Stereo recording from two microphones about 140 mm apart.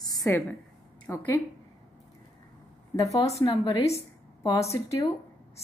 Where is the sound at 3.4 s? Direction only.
35° left (ahead or behind).